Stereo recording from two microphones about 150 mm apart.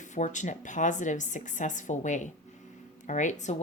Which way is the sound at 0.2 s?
55° left (ahead or behind).